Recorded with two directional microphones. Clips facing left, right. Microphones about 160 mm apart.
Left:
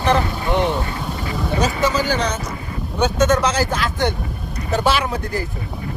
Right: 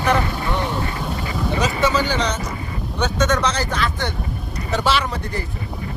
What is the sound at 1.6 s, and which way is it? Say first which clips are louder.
Speech: even; centre (ahead or behind).